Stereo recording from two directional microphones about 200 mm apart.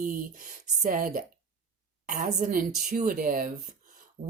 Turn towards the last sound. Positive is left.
turn(degrees=-50)  # may be behind; listen again after turning